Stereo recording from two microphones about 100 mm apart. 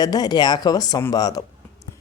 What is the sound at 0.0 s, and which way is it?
Speech, 40° left (ahead or behind).